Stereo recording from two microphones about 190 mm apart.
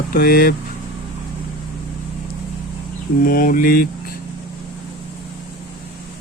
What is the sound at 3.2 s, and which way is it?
Speech, 50° left (ahead or behind).